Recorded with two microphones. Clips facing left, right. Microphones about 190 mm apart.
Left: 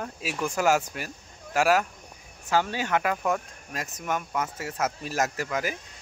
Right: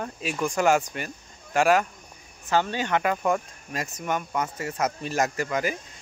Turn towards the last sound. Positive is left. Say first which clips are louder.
# right 3 dB
turn(degrees=0)  # may be behind; listen again after turning